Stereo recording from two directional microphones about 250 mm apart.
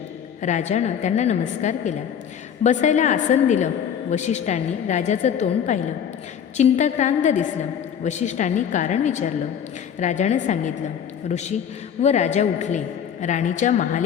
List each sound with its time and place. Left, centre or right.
0.4 s a woman's voice: left